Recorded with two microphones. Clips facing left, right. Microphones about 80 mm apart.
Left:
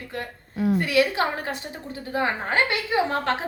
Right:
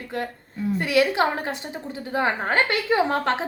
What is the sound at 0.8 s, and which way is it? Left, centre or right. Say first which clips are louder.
Speech: right 5 dB; right.